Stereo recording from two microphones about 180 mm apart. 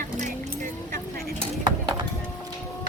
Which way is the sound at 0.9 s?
55° right (ahead or behind).